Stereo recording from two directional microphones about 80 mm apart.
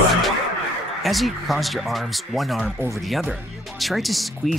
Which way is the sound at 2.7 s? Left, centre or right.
Right.